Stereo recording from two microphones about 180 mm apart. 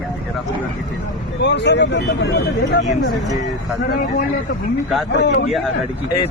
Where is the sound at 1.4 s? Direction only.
75° left (ahead or behind).